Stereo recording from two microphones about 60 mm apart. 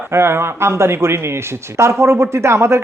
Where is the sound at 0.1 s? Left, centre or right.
Right.